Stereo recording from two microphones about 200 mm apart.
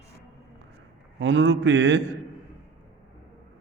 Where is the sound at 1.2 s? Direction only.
70° right (ahead or behind).